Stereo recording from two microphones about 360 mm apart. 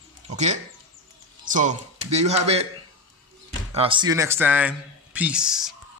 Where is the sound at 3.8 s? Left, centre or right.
Centre.